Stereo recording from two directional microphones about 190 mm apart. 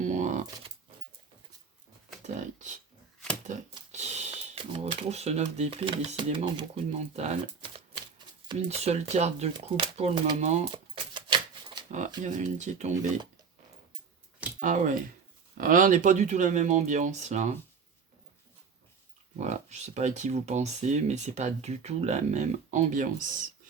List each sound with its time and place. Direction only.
0.0 s shuffling cards: 40° right (ahead or behind)
2.2 s a sound: 40° right (ahead or behind); by 6.7 s 25° right (ahead or behind)
7.2 s speech: 35° right (ahead or behind)
10.4 s speech: 35° right (ahead or behind)
11.1 s a sound: 25° right (ahead or behind)
12.2 s speech: 40° right (ahead or behind)
14.6 s speech: 40° right (ahead or behind)
19.4 s speech: 35° right (ahead or behind)